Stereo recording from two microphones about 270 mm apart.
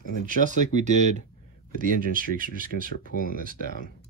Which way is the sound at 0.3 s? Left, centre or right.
Right.